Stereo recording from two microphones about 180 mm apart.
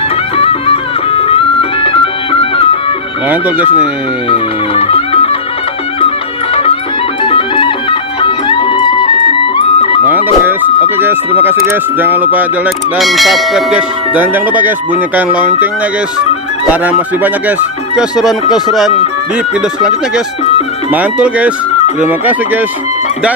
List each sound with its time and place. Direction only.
0.3 s music: 30° left (ahead or behind)
3.2 s speech: 10° right (ahead or behind)
4.3 s music: 30° left (ahead or behind)
7.2 s music: 30° left (ahead or behind)
10.1 s music: 10° right (ahead or behind)
10.9 s speech: 10° right (ahead or behind)
17.9 s speech: centre (ahead or behind)
20.9 s speech: 10° right (ahead or behind)